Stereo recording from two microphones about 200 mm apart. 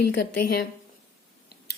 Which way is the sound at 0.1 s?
50° left (ahead or behind).